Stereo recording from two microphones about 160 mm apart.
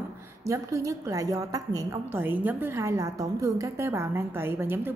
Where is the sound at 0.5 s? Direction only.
20° right (ahead or behind).